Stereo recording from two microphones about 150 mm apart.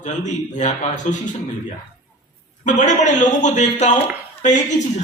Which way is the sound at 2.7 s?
55° left (ahead or behind).